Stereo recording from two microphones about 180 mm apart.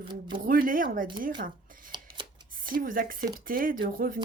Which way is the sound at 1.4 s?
50° right (ahead or behind).